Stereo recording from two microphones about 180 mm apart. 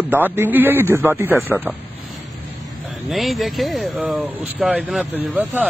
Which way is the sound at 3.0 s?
Centre (ahead or behind).